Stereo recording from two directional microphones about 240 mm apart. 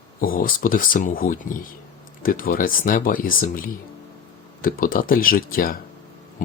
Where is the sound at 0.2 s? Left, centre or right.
Left.